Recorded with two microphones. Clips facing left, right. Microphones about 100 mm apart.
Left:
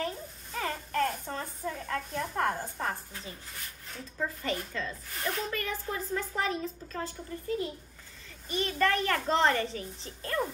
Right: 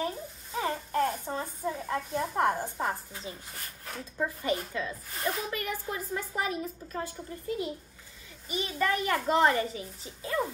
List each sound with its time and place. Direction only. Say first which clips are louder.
0.0 s a sound: right 2 dB; 10° right (ahead or behind)
2.0 s a child's voice: right 3 dB; 15° right (ahead or behind)
8.5 s a child's voice: left 1 dB; 10° right (ahead or behind)